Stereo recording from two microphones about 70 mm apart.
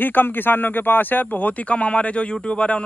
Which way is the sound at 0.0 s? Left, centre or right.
Left.